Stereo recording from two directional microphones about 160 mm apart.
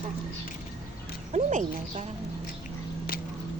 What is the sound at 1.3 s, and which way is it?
Speech, 50° right (ahead or behind).